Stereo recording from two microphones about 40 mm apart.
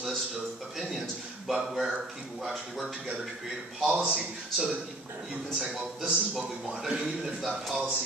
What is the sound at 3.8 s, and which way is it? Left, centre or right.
Speech, centre.